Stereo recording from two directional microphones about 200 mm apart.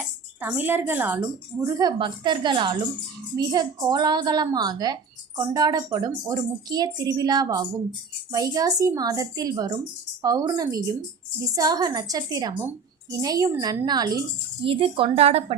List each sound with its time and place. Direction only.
0.3 s a woman's voice: 10° right (ahead or behind)
1.6 s a woman's voice: 20° right (ahead or behind)